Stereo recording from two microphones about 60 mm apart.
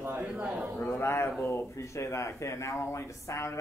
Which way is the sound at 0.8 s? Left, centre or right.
Left.